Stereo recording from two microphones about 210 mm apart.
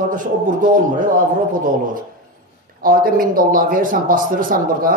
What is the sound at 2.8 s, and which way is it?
A man's voice, 45° right (ahead or behind).